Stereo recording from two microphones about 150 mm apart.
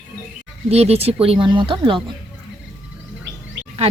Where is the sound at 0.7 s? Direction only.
45° right (ahead or behind).